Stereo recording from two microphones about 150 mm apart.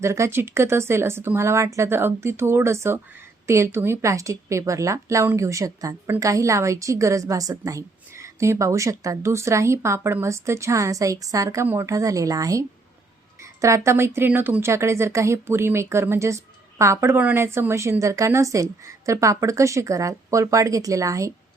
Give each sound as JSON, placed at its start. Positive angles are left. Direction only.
{"t": 0.0, "sound": "a woman's voice", "side_deg": -20}